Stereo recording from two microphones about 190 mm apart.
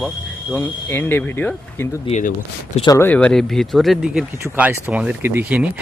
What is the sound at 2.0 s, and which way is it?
Speech, 40° left (ahead or behind).